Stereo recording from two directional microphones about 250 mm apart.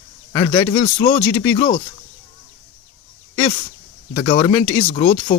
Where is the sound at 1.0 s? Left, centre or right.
Left.